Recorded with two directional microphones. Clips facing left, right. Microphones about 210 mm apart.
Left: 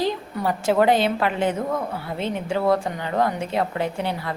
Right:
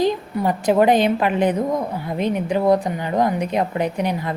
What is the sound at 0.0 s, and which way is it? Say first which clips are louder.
A woman's voice: right 4 dB; 20° right (ahead or behind).